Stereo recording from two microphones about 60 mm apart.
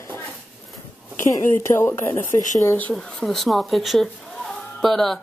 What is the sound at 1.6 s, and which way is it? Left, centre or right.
Speech, left.